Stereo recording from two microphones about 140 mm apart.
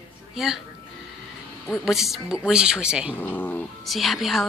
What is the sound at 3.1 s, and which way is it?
Speech, 15° left (ahead or behind).